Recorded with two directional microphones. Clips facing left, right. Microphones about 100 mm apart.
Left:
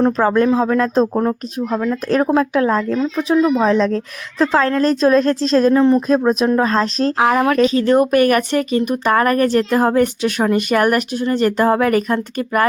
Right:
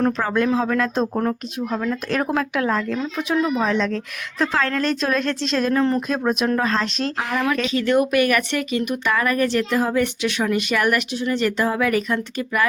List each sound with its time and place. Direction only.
0.0 s a woman's voice: 35° left (ahead or behind)
5.7 s speech: 20° left (ahead or behind)
6.1 s a woman's voice: 30° left (ahead or behind)